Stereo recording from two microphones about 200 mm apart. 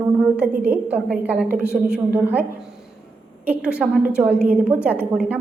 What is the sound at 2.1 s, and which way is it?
Speech, 10° right (ahead or behind).